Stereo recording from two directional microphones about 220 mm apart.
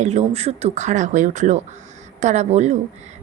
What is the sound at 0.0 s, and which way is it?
A woman's voice, 30° right (ahead or behind).